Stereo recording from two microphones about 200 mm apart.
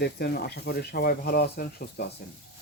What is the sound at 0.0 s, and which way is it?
Speech, 50° left (ahead or behind).